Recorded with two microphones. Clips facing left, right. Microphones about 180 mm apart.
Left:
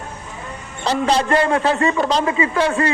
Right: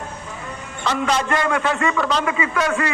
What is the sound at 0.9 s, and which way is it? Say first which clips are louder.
A man's voice: left 3 dB; 35° left (ahead or behind).